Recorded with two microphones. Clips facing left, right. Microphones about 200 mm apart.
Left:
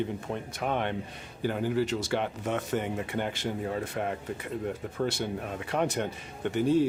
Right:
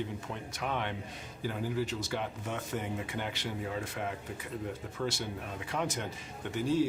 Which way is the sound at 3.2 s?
50° left (ahead or behind).